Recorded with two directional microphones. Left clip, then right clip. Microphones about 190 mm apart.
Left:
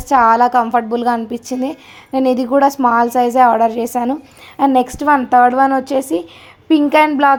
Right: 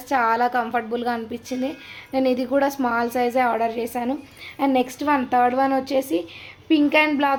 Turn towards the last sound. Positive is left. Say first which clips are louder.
# left 8 dB
turn(degrees=25)  # may be behind; listen again after turning